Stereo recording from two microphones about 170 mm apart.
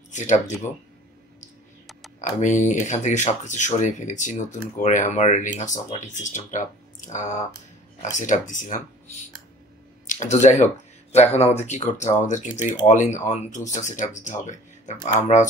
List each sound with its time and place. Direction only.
0.1 s speech: 45° left (ahead or behind)
2.1 s speech: 45° left (ahead or behind)
10.0 s a sound: 45° left (ahead or behind)
10.4 s speech: 45° left (ahead or behind)